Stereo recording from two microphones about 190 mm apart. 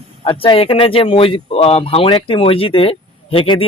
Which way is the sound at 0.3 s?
30° left (ahead or behind).